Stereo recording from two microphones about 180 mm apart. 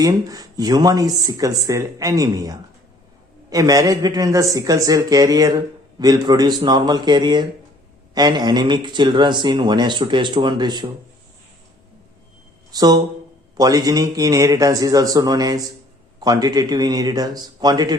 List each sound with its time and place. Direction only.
0.0 s speech: 20° right (ahead or behind)
12.7 s speech: 20° right (ahead or behind)